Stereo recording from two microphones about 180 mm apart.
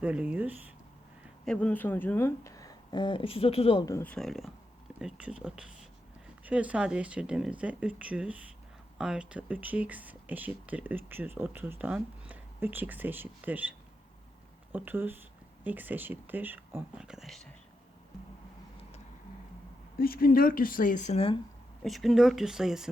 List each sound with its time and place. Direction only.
0.0 s speech: 5° right (ahead or behind)
1.5 s speech: 5° left (ahead or behind); by 3.8 s 30° left (ahead or behind)
3.8 s speech: 10° left (ahead or behind)
20.0 s speech: 55° left (ahead or behind); by 21.3 s 35° left (ahead or behind)
21.8 s speech: centre (ahead or behind)